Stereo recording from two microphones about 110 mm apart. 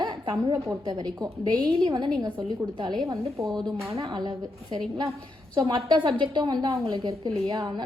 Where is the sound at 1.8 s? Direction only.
50° right (ahead or behind).